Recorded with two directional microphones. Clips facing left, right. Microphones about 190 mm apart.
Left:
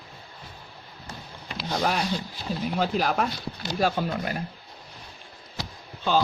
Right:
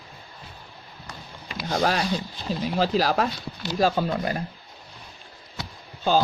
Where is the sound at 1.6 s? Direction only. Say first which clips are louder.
Right 3 dB; 50° right (ahead or behind).